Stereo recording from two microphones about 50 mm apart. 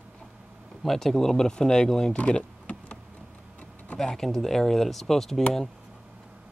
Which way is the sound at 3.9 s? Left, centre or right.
Centre.